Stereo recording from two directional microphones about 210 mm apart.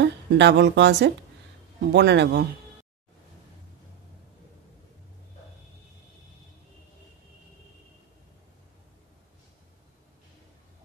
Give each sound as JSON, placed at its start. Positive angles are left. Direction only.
{"t": 0.0, "sound": "speech", "side_deg": -55}